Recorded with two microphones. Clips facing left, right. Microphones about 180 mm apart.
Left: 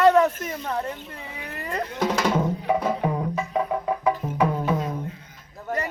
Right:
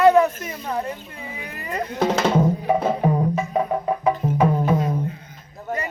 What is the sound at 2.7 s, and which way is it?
Music, 25° right (ahead or behind).